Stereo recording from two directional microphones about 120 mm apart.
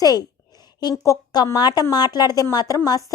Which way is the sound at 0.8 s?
35° left (ahead or behind).